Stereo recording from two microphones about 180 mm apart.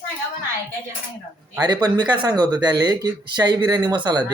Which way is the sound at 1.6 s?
20° right (ahead or behind).